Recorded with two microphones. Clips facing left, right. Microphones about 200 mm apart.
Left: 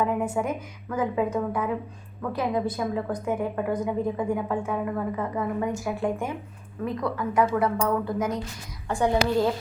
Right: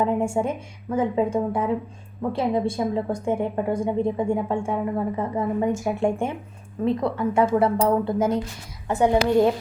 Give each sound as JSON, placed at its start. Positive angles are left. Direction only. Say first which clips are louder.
{"t": 0.0, "sound": "a woman's voice", "louder": "right 3 dB", "side_deg": -30}